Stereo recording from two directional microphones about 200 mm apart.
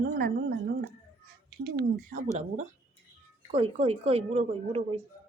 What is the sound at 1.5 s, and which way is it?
Speech, 50° right (ahead or behind).